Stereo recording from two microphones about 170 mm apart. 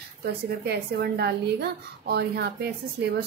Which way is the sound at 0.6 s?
70° right (ahead or behind).